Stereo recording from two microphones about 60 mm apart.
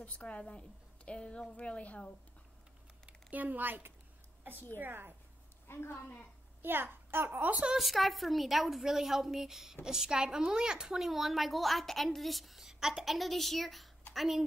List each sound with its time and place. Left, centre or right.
0.0 s a woman's voice: left
3.1 s a woman's voice: right
5.7 s a woman's voice: left
6.6 s a child's voice: right
7.7 s a woman's voice: centre